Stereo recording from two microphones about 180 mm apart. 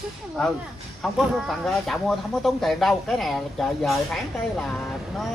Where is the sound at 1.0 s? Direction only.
Centre (ahead or behind).